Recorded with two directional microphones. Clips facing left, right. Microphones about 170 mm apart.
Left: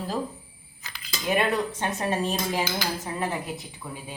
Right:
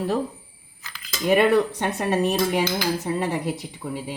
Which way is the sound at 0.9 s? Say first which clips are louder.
Right 6 dB; 65° right (ahead or behind).